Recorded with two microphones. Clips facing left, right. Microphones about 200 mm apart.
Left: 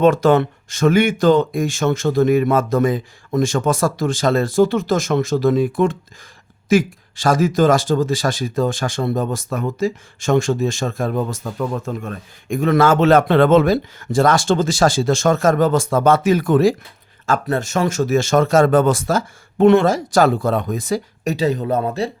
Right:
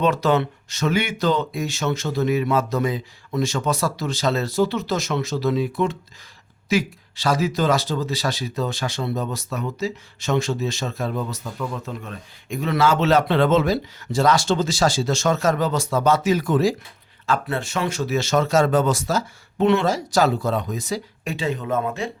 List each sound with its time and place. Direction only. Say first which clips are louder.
0.0 s speech: left 6 dB; 50° left (ahead or behind)
17.2 s speech: left 4 dB; 45° left (ahead or behind)
21.3 s speech: left 5 dB; 40° left (ahead or behind)